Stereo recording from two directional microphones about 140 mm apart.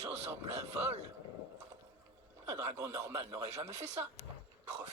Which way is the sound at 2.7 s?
25° right (ahead or behind).